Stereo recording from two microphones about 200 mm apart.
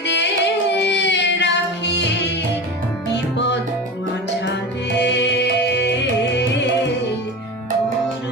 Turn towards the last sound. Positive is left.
turn(degrees=60)  # may be behind; listen again after turning